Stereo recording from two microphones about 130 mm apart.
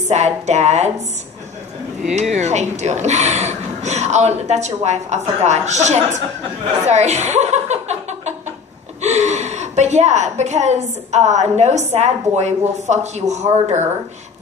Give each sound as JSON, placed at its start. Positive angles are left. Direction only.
{"t": 0.0, "sound": "a woman's voice", "side_deg": -60}
{"t": 2.3, "sound": "a woman's voice", "side_deg": -60}
{"t": 6.9, "sound": "chuckle", "side_deg": -60}
{"t": 9.0, "sound": "a woman's voice", "side_deg": -60}